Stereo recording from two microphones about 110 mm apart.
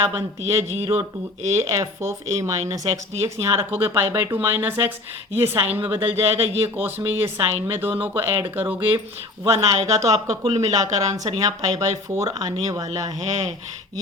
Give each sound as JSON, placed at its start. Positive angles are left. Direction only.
{"t": 0.0, "sound": "speech", "side_deg": -25}